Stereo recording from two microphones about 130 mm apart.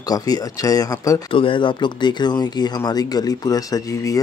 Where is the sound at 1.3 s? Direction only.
40° left (ahead or behind).